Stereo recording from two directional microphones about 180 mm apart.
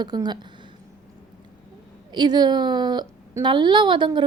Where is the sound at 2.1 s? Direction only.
25° right (ahead or behind).